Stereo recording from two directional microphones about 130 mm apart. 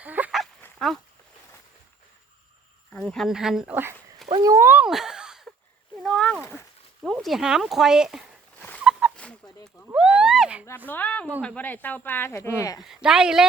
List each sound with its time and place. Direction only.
0.0 s livestock: 10° right (ahead or behind)
2.9 s speech: 5° left (ahead or behind)
4.4 s speech: 20° right (ahead or behind)
4.9 s a sound: 5° right (ahead or behind)
7.0 s speech: centre (ahead or behind)
8.8 s fowl: 5° right (ahead or behind)
9.9 s a sound: 5° right (ahead or behind)
10.8 s speech: 15° left (ahead or behind)
12.8 s speech: 5° right (ahead or behind)